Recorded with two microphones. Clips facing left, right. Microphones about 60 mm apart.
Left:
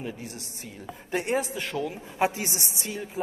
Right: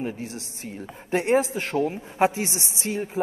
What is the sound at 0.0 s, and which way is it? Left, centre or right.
A man's voice, right.